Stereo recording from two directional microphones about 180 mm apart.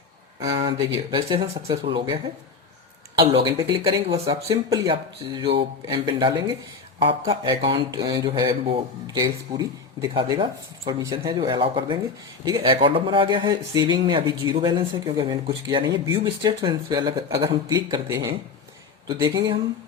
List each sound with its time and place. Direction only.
0.3 s speech: 25° right (ahead or behind)
3.2 s speech: 25° right (ahead or behind)